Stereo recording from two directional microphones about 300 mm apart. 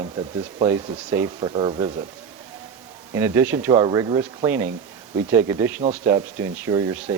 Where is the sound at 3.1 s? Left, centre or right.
Centre.